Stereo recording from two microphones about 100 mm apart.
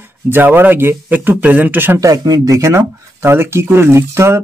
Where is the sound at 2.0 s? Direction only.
40° right (ahead or behind).